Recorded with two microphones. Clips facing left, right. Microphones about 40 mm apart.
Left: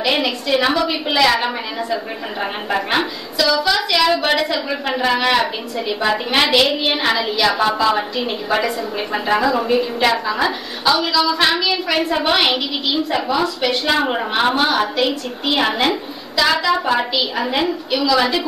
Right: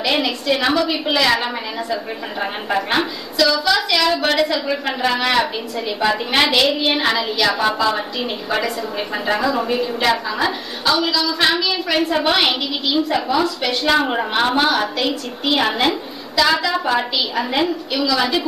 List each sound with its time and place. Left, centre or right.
0.0 s a woman's voice: centre